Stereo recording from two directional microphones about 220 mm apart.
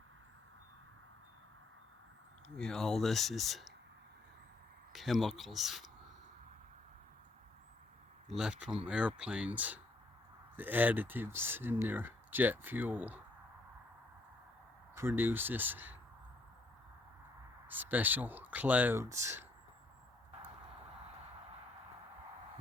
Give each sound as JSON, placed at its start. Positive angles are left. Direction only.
{"t": 2.6, "sound": "speech", "side_deg": 0}
{"t": 4.9, "sound": "speech", "side_deg": 0}
{"t": 8.3, "sound": "speech", "side_deg": -5}
{"t": 14.9, "sound": "speech", "side_deg": -10}
{"t": 17.7, "sound": "speech", "side_deg": -10}